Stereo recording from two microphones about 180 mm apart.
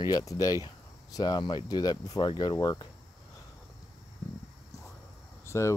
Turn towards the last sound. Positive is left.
turn(degrees=15)  # may be behind; listen again after turning